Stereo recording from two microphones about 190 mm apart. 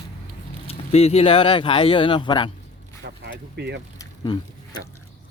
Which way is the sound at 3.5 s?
65° right (ahead or behind).